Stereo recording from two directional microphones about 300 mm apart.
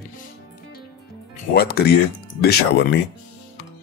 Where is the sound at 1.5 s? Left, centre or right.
Left.